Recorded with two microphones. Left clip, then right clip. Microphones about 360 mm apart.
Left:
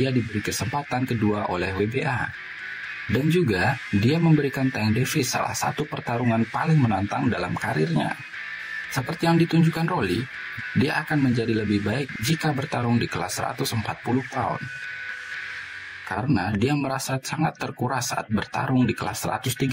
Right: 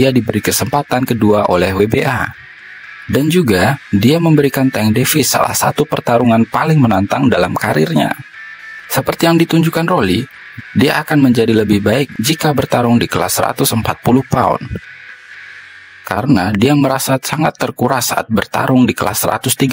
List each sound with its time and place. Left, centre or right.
0.0 s speech: right
4.0 s speech: right
16.1 s speech: right